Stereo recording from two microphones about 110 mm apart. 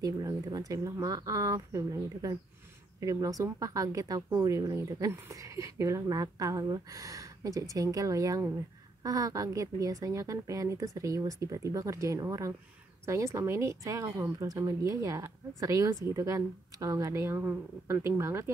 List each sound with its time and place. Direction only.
0.0 s speech: 35° right (ahead or behind)